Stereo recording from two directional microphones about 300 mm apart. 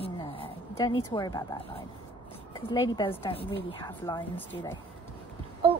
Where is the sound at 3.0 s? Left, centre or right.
Centre.